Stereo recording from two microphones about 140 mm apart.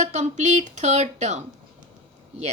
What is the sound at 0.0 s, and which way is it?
Speech, 55° right (ahead or behind).